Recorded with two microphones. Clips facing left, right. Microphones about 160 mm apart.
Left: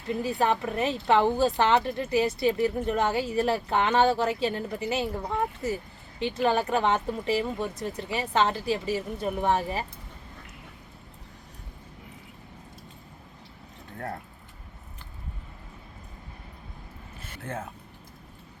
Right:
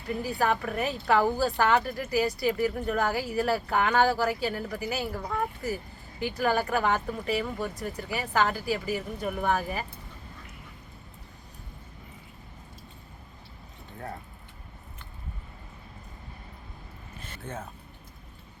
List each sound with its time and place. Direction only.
0.1 s speech: 25° left (ahead or behind)